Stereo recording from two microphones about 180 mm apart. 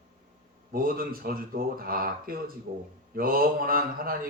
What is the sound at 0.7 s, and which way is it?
Speech, 55° right (ahead or behind).